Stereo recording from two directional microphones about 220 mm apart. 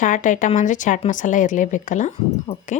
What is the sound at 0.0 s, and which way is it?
A woman's voice, 35° left (ahead or behind).